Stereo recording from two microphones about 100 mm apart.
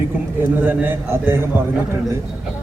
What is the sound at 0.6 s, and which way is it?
Speech, 20° right (ahead or behind).